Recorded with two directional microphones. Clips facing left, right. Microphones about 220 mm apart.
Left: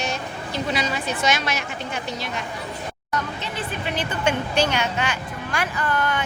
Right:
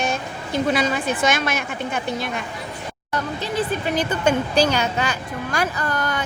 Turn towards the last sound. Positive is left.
turn(degrees=-40)  # may be behind; listen again after turning